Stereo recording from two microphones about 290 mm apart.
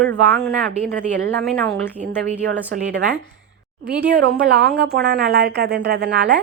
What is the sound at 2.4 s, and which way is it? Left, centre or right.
Speech, right.